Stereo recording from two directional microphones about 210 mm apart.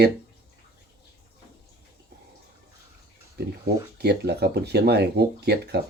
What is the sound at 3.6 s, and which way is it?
Speech, 50° right (ahead or behind).